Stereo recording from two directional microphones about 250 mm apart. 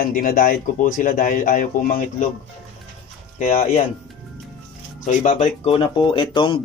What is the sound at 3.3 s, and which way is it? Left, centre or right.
Speech, left.